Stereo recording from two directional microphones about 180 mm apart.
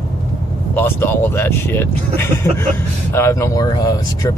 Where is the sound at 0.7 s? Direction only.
10° left (ahead or behind).